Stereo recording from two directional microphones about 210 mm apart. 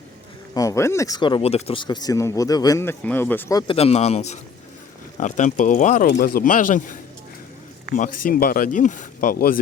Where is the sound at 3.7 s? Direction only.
30° left (ahead or behind).